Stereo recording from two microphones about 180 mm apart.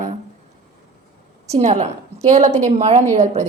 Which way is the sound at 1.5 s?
40° right (ahead or behind).